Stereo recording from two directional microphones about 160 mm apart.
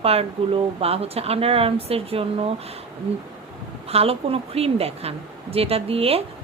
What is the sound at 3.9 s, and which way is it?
A woman's voice, 40° right (ahead or behind).